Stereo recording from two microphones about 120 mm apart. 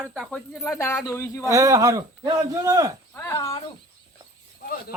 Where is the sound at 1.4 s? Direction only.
25° right (ahead or behind).